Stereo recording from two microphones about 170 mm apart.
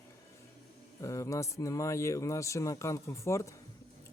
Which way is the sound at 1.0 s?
20° left (ahead or behind).